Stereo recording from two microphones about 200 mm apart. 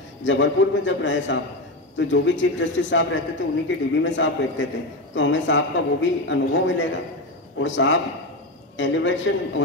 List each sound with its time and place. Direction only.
0.2 s a man's voice: 65° left (ahead or behind)